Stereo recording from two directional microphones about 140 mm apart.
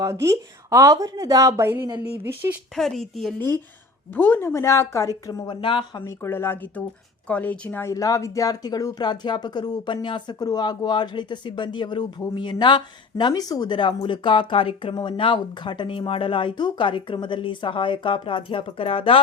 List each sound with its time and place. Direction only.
0.0 s speech: 20° right (ahead or behind)
2.7 s speech: centre (ahead or behind)
4.1 s a woman's voice: 15° left (ahead or behind)
5.5 s speech: 35° left (ahead or behind)
6.1 s speech: 15° left (ahead or behind); by 19.2 s 40° left (ahead or behind)